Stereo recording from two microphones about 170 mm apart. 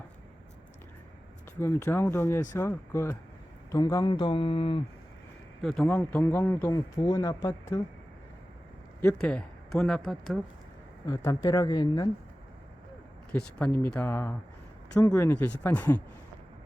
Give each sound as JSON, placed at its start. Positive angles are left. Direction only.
{"t": 1.5, "sound": "speech", "side_deg": 15}
{"t": 5.6, "sound": "speech", "side_deg": 5}
{"t": 9.0, "sound": "speech", "side_deg": 10}
{"t": 11.0, "sound": "speech", "side_deg": 20}
{"t": 13.3, "sound": "speech", "side_deg": 10}